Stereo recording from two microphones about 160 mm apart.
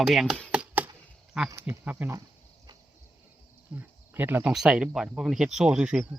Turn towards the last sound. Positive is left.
turn(degrees=-5)  # may be behind; listen again after turning